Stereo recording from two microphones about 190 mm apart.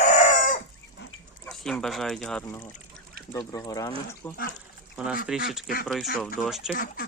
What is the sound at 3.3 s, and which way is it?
Speech, 20° left (ahead or behind).